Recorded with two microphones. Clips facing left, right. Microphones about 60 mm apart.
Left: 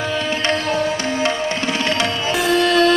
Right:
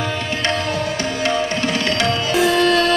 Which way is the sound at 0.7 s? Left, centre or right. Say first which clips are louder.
Left 2 dB; left.